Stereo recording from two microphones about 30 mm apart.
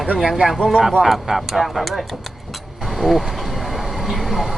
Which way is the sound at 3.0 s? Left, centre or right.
Centre.